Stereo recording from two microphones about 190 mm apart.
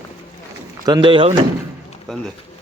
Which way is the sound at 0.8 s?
25° right (ahead or behind).